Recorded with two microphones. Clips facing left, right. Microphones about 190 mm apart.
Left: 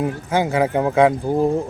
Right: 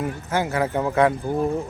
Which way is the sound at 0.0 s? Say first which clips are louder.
Left 4 dB; 15° left (ahead or behind).